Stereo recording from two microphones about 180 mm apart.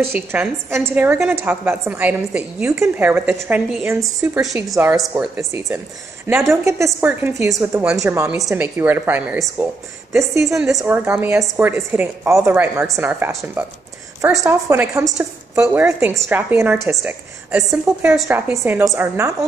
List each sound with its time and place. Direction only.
0.3 s a woman's voice: 15° right (ahead or behind)
18.3 s a woman's voice: 15° right (ahead or behind)